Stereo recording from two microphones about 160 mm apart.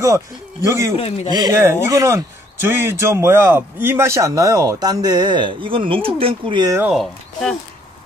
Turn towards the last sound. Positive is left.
turn(degrees=0)  # may be behind; listen again after turning